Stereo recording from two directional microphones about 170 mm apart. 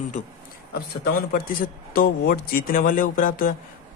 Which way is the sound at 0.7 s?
60° left (ahead or behind).